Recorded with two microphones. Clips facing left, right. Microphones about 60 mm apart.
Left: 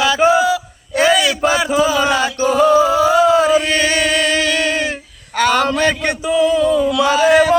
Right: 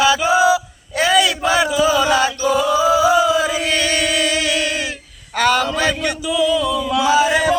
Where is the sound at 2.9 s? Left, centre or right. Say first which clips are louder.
Even; centre.